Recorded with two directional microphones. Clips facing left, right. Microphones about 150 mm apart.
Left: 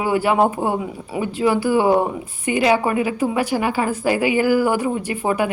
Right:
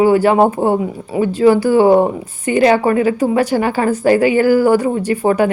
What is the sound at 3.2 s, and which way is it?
A woman's voice, 40° right (ahead or behind).